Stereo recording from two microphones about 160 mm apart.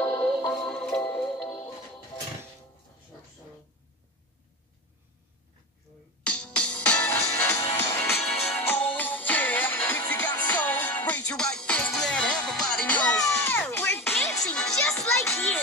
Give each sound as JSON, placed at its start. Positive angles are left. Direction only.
{"t": 0.0, "sound": "music", "side_deg": 15}
{"t": 0.3, "sound": "music", "side_deg": 5}
{"t": 6.2, "sound": "music", "side_deg": 10}
{"t": 13.1, "sound": "music", "side_deg": 20}
{"t": 14.3, "sound": "music", "side_deg": 5}